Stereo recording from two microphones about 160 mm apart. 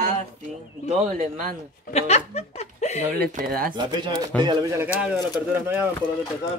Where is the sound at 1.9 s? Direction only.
45° left (ahead or behind).